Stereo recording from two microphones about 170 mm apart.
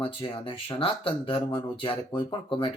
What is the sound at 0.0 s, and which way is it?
Speech, 30° left (ahead or behind).